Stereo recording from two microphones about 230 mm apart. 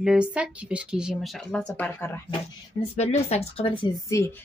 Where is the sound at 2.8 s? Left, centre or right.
Left.